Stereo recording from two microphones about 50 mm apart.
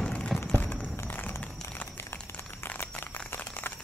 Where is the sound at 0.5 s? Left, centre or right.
Left.